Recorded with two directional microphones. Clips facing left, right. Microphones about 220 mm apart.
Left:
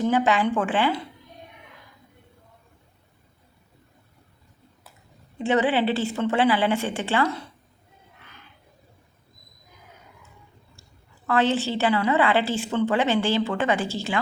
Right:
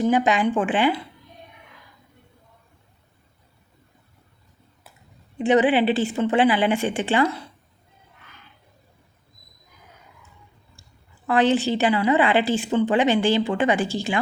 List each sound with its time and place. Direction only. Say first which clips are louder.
0.0 s a woman's voice: right 2 dB; 15° right (ahead or behind)
5.4 s a woman's voice: right 4 dB; 15° right (ahead or behind)
11.3 s a woman's voice: right 3 dB; 15° right (ahead or behind)